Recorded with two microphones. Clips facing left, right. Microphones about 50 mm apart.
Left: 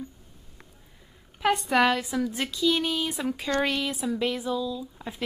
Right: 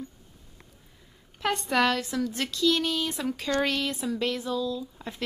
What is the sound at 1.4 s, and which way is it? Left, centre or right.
Speech, centre.